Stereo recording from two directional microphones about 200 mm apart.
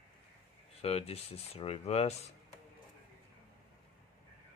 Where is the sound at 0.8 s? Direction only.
30° left (ahead or behind).